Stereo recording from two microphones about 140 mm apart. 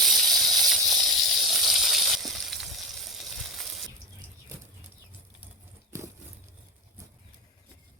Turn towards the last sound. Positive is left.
turn(degrees=-20)  # may be behind; listen again after turning